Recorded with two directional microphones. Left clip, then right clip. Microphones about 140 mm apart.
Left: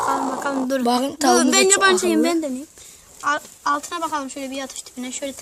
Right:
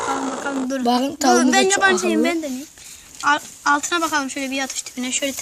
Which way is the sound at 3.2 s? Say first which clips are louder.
Right 4 dB; 50° left (ahead or behind).